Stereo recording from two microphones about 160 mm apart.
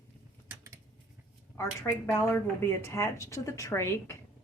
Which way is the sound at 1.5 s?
15° left (ahead or behind).